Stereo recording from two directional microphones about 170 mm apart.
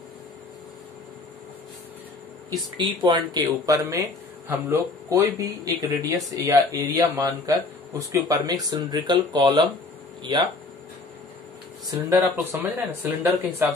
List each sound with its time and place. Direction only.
2.8 s speech: 25° right (ahead or behind)
12.2 s speech: 15° right (ahead or behind)